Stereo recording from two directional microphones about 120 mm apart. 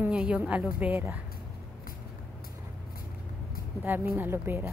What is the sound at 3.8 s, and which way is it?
Speech, 15° right (ahead or behind).